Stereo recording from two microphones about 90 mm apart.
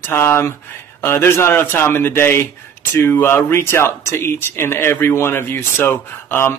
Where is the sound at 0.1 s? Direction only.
30° left (ahead or behind).